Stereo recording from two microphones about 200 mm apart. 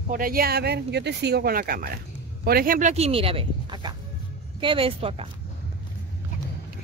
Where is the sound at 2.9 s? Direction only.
30° right (ahead or behind).